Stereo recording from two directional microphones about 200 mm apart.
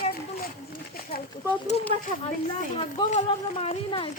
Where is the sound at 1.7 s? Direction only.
30° left (ahead or behind).